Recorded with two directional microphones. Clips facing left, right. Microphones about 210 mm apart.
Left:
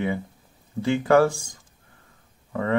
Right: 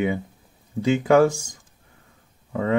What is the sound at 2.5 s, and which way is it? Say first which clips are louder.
Speech: right 2 dB; 15° right (ahead or behind).